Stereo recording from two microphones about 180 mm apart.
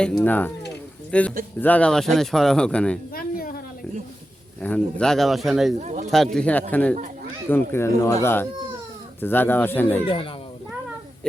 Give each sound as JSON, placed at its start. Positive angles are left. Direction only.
{"t": 0.0, "sound": "speech", "side_deg": 10}
{"t": 3.1, "sound": "a sound", "side_deg": 55}
{"t": 4.6, "sound": "speech", "side_deg": 5}
{"t": 5.8, "sound": "speech", "side_deg": -40}
{"t": 6.3, "sound": "speech", "side_deg": 5}
{"t": 10.1, "sound": "a child's voice", "side_deg": 30}